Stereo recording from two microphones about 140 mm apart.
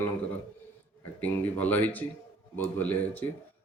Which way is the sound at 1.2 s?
10° left (ahead or behind).